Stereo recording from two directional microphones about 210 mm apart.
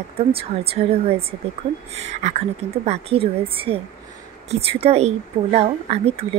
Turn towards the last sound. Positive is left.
turn(degrees=-30)  # may be behind; listen again after turning